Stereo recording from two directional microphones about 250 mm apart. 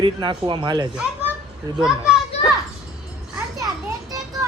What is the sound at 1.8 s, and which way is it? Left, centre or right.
Speech, centre.